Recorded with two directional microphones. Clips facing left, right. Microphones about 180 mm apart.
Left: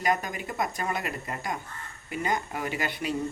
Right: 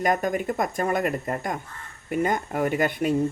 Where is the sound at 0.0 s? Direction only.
50° right (ahead or behind).